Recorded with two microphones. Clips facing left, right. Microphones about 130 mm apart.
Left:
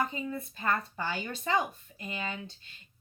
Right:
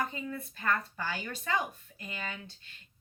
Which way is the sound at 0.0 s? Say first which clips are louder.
Left 3 dB; 20° left (ahead or behind).